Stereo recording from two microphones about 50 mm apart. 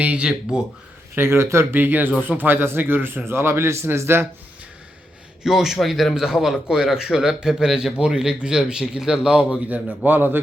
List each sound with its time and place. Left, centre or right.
0.0 s speech: right
0.3 s a man's voice: centre
1.1 s speech: right
1.7 s a man's voice: right
5.4 s a man's voice: centre
9.6 s a man's voice: right